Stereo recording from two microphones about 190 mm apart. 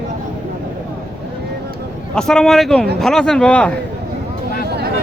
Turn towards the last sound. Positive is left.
turn(degrees=5)  # may be behind; listen again after turning